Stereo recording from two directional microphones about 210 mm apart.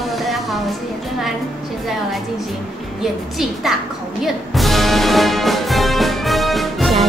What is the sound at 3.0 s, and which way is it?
Speech, centre (ahead or behind).